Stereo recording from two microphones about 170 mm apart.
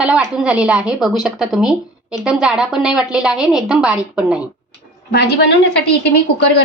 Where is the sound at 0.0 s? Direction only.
5° right (ahead or behind).